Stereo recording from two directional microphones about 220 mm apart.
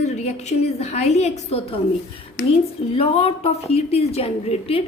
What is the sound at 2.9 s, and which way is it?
A woman's voice, 25° left (ahead or behind).